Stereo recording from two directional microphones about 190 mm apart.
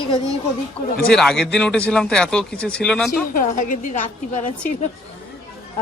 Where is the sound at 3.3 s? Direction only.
45° left (ahead or behind).